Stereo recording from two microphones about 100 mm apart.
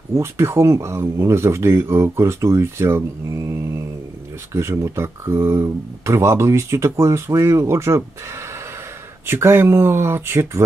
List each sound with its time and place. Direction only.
0.1 s speech: 25° right (ahead or behind)